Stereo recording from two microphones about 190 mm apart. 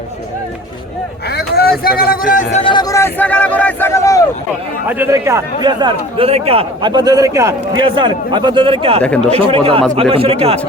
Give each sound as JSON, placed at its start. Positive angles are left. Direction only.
{"t": 1.4, "sound": "vehicle", "side_deg": 55}
{"t": 1.8, "sound": "a man's voice", "side_deg": 50}
{"t": 2.7, "sound": "a sound", "side_deg": 15}
{"t": 4.9, "sound": "speech", "side_deg": -10}
{"t": 9.0, "sound": "speech", "side_deg": 5}
{"t": 9.3, "sound": "speech", "side_deg": -30}